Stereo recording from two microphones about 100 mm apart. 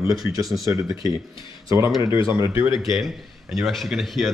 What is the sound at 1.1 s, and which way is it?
Speech, 50° left (ahead or behind).